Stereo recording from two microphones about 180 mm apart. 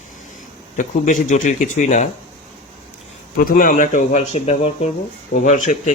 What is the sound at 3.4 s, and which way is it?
Speech, 50° left (ahead or behind).